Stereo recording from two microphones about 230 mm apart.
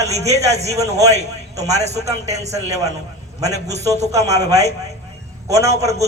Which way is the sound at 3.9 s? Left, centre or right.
Right.